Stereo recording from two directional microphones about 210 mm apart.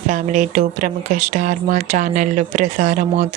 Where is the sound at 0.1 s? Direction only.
35° right (ahead or behind).